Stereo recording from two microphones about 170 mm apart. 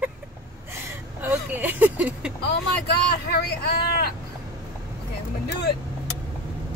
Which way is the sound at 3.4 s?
65° left (ahead or behind).